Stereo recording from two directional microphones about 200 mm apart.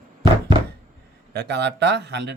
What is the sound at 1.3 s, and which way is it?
Speech, 60° right (ahead or behind).